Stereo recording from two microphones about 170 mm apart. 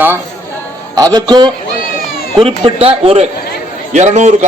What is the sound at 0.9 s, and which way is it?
A man's voice, 25° right (ahead or behind).